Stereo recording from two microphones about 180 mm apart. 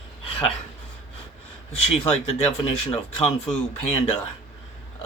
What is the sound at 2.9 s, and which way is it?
Speech, 30° left (ahead or behind).